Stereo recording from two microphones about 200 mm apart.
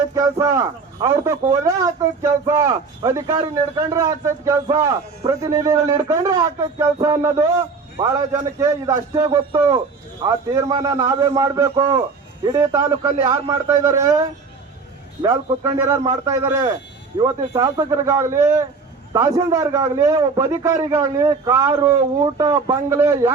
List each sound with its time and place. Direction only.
0.1 s speech: 15° right (ahead or behind)